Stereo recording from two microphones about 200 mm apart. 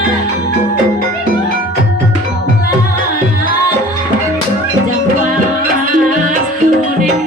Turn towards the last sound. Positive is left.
turn(degrees=-40)  # may be behind; listen again after turning